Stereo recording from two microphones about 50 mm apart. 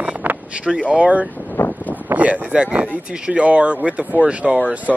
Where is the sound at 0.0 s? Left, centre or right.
Right.